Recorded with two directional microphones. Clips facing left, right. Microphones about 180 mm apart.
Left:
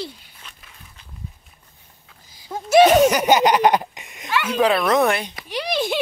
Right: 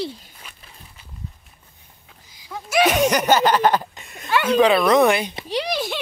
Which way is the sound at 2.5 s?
25° left (ahead or behind).